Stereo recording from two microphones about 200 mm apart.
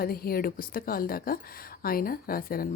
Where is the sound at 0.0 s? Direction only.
50° left (ahead or behind).